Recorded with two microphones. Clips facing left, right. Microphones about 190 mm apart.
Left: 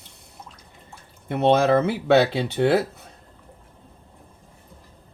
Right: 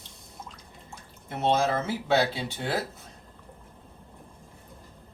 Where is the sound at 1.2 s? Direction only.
65° left (ahead or behind).